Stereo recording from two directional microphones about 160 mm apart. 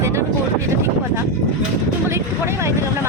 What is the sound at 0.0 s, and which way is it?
Vehicle, 20° right (ahead or behind).